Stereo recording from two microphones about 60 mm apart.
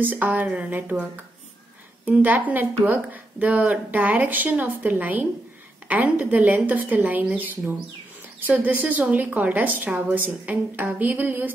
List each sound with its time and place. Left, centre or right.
0.0 s a woman's voice: right